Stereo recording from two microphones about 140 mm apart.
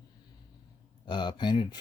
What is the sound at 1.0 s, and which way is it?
Speech, 30° left (ahead or behind).